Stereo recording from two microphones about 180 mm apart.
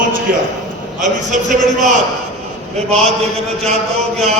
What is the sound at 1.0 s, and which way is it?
A man's voice, 45° right (ahead or behind).